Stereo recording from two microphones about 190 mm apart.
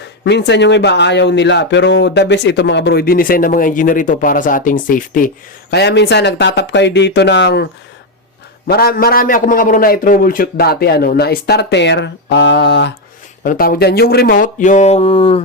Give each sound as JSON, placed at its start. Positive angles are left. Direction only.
{"t": 0.0, "sound": "speech", "side_deg": 60}
{"t": 5.7, "sound": "speech", "side_deg": 65}
{"t": 8.6, "sound": "a man's voice", "side_deg": 55}
{"t": 13.4, "sound": "a man's voice", "side_deg": 50}